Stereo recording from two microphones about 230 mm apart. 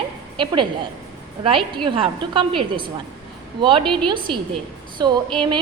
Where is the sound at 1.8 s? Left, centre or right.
Right.